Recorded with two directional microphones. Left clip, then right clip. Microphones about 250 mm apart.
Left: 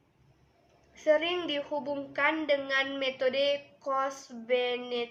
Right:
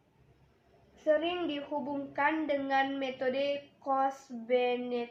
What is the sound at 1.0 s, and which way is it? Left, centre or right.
A woman's voice, left.